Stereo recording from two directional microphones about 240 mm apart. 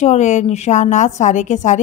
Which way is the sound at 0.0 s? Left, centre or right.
Left.